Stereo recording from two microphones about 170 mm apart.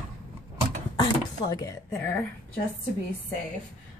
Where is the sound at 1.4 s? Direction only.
20° left (ahead or behind).